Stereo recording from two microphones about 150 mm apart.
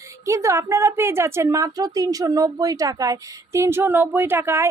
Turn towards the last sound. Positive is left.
turn(degrees=-15)  # may be behind; listen again after turning